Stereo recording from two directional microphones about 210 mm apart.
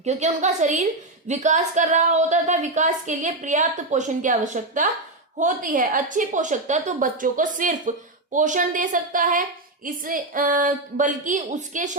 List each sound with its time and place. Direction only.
0.0 s a woman's voice: 35° right (ahead or behind)